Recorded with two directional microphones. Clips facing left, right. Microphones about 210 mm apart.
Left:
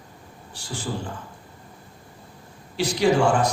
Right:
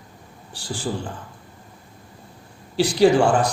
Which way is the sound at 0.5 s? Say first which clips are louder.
Right 2 dB; 35° right (ahead or behind).